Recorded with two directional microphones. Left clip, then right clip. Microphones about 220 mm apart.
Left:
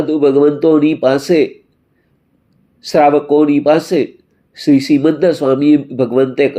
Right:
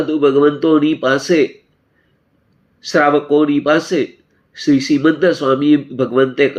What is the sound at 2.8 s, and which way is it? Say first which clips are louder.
Speech: left 3 dB; 20° left (ahead or behind).